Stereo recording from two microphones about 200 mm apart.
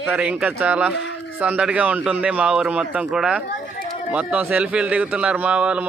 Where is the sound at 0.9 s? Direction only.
65° left (ahead or behind).